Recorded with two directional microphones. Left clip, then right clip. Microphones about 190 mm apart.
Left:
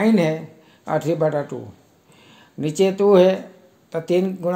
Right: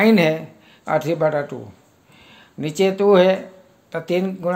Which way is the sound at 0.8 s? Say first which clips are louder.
Right 1 dB; 10° left (ahead or behind).